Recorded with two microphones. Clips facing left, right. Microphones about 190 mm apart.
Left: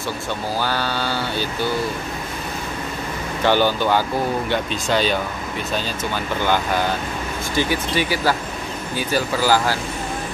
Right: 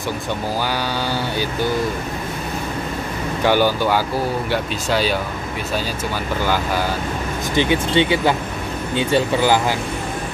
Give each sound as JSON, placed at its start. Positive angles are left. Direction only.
{"t": 0.7, "sound": "speech", "side_deg": -15}
{"t": 3.4, "sound": "speech", "side_deg": -10}
{"t": 7.5, "sound": "speech", "side_deg": -25}